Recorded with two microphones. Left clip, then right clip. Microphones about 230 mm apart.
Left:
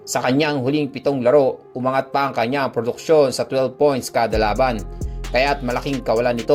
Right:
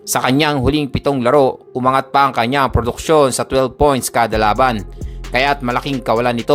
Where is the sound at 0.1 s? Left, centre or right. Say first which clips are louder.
Right 4 dB; right.